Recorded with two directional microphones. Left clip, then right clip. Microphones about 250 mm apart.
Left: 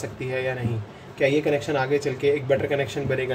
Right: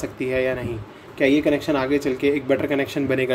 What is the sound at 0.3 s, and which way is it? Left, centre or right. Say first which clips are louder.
Speech: right 5 dB; right.